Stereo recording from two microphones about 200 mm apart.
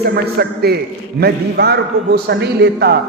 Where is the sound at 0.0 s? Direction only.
50° right (ahead or behind).